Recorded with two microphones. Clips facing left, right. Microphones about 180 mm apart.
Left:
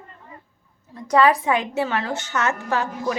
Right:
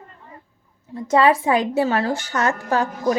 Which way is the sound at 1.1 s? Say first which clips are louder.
Right 1 dB; 25° right (ahead or behind).